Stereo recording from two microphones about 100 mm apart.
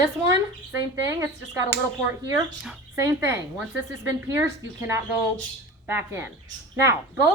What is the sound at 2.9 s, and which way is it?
Speech, 30° right (ahead or behind).